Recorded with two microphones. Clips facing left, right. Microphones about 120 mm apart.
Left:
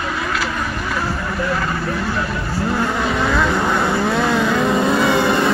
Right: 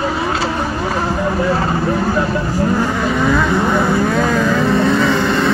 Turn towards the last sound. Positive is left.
turn(degrees=15)  # may be behind; listen again after turning